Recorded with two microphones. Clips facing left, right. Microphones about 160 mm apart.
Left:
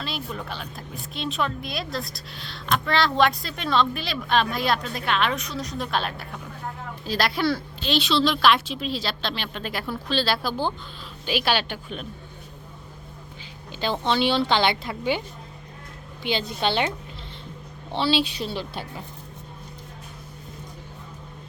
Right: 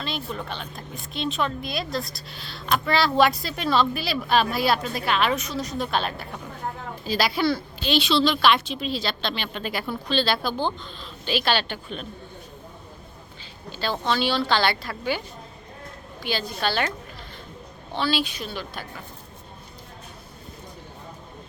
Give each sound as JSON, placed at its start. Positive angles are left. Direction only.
{"t": 0.0, "sound": "a woman's voice", "side_deg": 5}
{"t": 13.7, "sound": "a woman's voice", "side_deg": 20}
{"t": 16.2, "sound": "a woman's voice", "side_deg": 20}
{"t": 17.9, "sound": "a woman's voice", "side_deg": 30}